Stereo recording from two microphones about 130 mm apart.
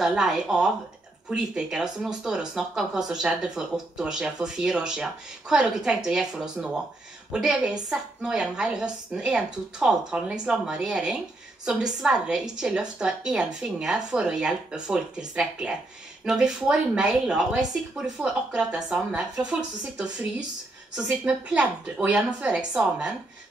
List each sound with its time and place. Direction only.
0.0 s a woman's voice: 5° right (ahead or behind)